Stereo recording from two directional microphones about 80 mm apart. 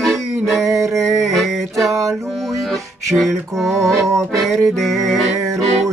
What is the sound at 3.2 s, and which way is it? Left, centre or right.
Music, centre.